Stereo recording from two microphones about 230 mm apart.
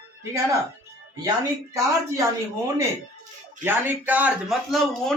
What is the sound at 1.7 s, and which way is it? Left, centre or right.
Speech, centre.